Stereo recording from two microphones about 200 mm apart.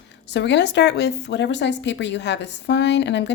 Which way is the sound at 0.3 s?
60° left (ahead or behind).